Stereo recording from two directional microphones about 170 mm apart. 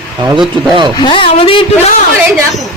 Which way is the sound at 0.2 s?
25° right (ahead or behind).